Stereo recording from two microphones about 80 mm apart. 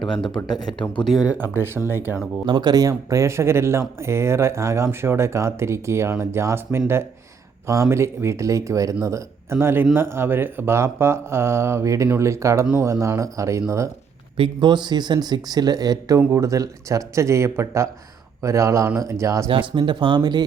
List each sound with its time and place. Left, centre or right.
0.7 s speech: left
1.0 s speech: centre
1.3 s speech: right
2.5 s speech: right
14.3 s speech: right
19.5 s speech: right